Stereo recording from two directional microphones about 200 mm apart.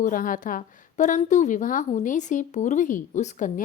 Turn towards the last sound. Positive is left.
turn(degrees=40)  # may be behind; listen again after turning